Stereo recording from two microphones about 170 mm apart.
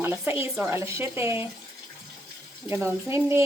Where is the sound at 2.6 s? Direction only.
15° right (ahead or behind).